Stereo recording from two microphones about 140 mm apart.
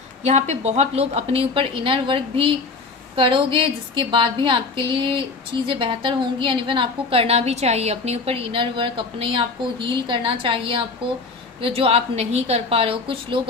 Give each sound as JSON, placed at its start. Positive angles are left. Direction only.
{"t": 0.2, "sound": "a woman's voice", "side_deg": -55}